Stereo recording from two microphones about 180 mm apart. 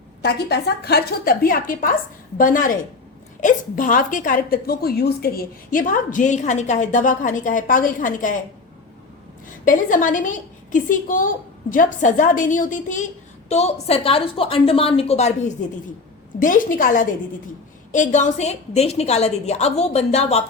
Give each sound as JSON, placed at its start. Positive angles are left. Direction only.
{"t": 0.2, "sound": "a woman's voice", "side_deg": 60}
{"t": 9.6, "sound": "a woman's voice", "side_deg": 45}
{"t": 16.4, "sound": "a woman's voice", "side_deg": 50}